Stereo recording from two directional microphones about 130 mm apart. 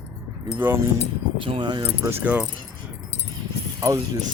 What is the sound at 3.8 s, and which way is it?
Speech, 25° right (ahead or behind).